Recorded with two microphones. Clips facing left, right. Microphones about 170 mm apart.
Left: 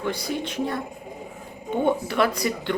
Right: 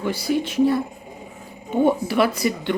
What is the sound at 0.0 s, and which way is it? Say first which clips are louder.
Speech: right 5 dB; 5° right (ahead or behind).